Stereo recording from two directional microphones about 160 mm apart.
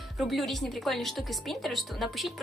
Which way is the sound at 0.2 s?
Centre (ahead or behind).